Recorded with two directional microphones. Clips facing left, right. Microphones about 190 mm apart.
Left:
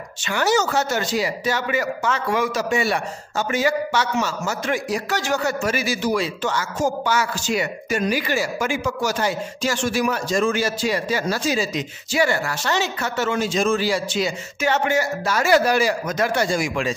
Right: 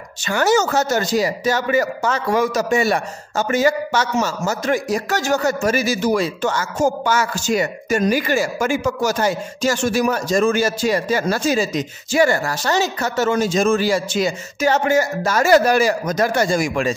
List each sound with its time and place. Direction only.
0.2 s speech: 45° right (ahead or behind)